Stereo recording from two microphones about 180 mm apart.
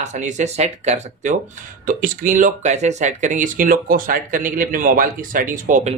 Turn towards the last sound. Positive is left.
turn(degrees=-40)  # may be behind; listen again after turning